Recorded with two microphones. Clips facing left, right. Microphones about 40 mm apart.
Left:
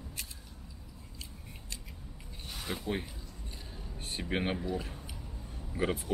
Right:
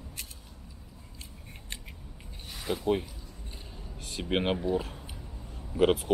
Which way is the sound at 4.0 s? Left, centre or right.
Right.